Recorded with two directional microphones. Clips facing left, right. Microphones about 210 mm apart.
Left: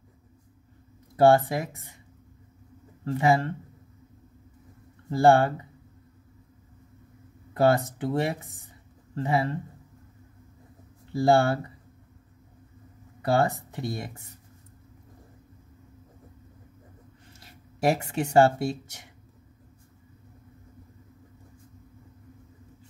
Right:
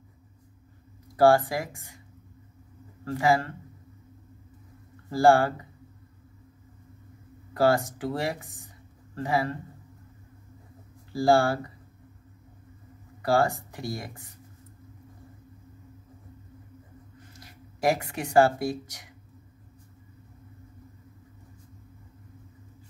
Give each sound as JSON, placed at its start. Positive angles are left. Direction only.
{"t": 1.1, "sound": "speech", "side_deg": 25}
{"t": 3.2, "sound": "speech", "side_deg": 25}
{"t": 5.1, "sound": "speech", "side_deg": 20}
{"t": 7.5, "sound": "speech", "side_deg": 20}
{"t": 11.2, "sound": "speech", "side_deg": 25}
{"t": 13.2, "sound": "speech", "side_deg": 20}
{"t": 17.4, "sound": "speech", "side_deg": 25}